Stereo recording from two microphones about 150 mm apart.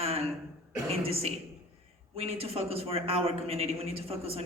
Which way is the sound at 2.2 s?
40° right (ahead or behind).